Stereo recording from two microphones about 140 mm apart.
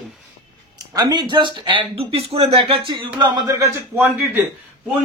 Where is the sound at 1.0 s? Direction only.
30° right (ahead or behind).